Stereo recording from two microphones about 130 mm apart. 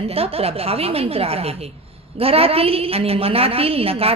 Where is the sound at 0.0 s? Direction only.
50° right (ahead or behind).